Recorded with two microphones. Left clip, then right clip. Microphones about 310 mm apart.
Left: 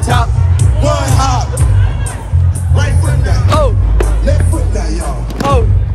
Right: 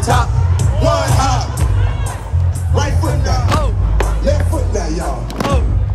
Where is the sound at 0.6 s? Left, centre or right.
Right.